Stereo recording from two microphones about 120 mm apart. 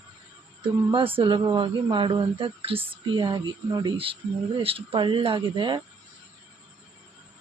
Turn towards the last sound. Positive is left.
turn(degrees=-40)  # may be behind; listen again after turning